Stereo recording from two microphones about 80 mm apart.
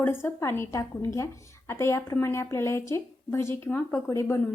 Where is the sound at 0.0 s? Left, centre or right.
Left.